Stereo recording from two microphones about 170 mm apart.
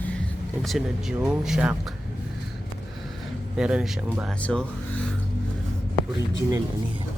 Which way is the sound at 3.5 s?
5° right (ahead or behind).